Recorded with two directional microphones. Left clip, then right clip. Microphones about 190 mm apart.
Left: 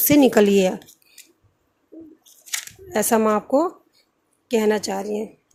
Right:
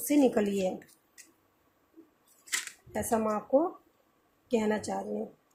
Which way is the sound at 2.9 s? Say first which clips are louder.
Left 11 dB; 50° left (ahead or behind).